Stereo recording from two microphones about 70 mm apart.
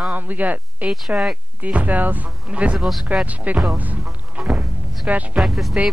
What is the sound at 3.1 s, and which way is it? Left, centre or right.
Speech, centre.